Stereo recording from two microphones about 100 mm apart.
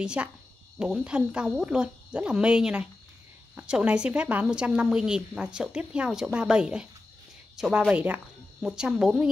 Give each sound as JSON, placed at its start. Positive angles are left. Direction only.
{"t": 0.0, "sound": "a woman's voice", "side_deg": -10}
{"t": 7.9, "sound": "a woman's voice", "side_deg": -15}